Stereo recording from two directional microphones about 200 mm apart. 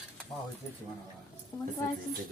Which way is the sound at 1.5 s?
20° left (ahead or behind).